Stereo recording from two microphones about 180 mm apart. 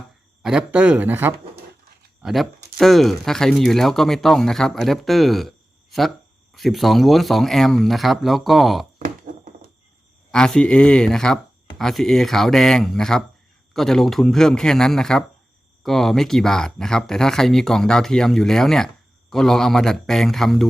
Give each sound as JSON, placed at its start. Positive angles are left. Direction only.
{"t": 0.4, "sound": "speech", "side_deg": -5}
{"t": 2.2, "sound": "speech", "side_deg": 0}
{"t": 9.0, "sound": "a sound", "side_deg": -45}
{"t": 10.3, "sound": "speech", "side_deg": 5}